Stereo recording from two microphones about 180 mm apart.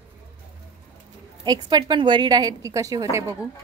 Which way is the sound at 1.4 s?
20° right (ahead or behind).